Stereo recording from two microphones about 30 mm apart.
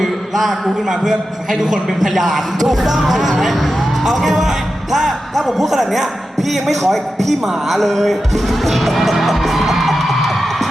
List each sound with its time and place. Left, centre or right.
0.3 s a man's voice: centre
2.1 s a man's voice: centre
7.7 s music: centre